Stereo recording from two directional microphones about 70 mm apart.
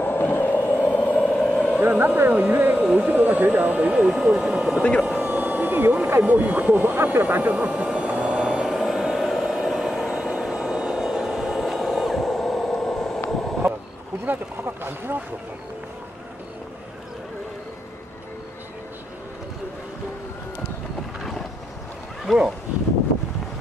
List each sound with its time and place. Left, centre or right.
0.0 s vehicle: left
1.2 s vehicle: centre
1.8 s speech: centre
3.9 s speech: centre
5.0 s vehicle: centre
5.4 s a sound: right
6.2 s speech: right
7.8 s vehicle: centre
14.2 s a sound: right
22.2 s a sound: centre